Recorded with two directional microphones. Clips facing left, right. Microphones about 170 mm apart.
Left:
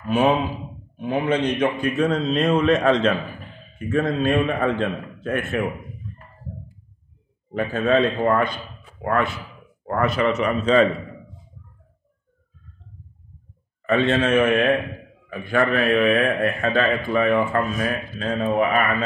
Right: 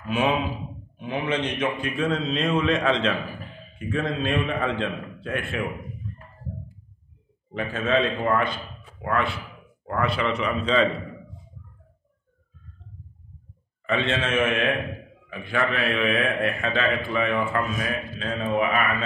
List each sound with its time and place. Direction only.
0.0 s a man's voice: 40° left (ahead or behind)
7.5 s a man's voice: 45° left (ahead or behind)
13.8 s a man's voice: 45° left (ahead or behind)
15.6 s a man's voice: 50° left (ahead or behind)